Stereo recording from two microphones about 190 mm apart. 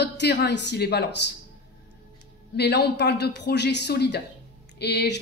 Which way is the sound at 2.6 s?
60° left (ahead or behind).